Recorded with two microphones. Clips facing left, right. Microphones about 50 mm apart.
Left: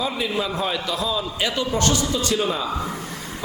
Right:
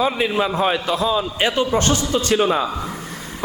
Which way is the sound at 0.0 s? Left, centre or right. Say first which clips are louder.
Right 5 dB; right.